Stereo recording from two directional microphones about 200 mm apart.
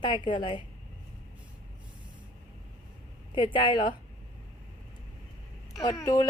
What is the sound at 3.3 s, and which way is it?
Speech, 25° left (ahead or behind).